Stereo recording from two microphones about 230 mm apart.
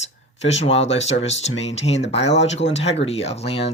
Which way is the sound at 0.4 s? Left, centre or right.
Left.